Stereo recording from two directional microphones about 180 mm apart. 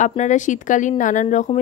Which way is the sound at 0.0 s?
40° left (ahead or behind).